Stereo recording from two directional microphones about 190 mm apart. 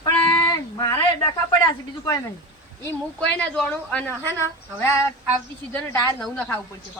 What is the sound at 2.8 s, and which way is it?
Speech, 10° left (ahead or behind).